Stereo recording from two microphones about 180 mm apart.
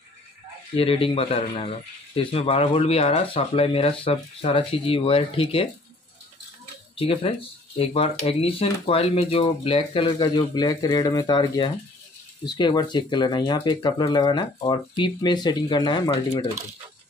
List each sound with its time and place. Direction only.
0.7 s speech: 30° left (ahead or behind)
7.0 s speech: 30° left (ahead or behind)